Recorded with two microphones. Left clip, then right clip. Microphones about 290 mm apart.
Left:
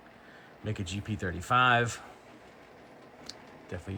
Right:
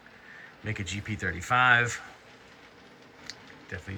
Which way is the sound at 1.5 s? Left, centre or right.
Centre.